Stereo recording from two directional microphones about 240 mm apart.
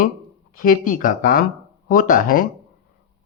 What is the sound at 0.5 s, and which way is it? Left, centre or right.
Speech, left.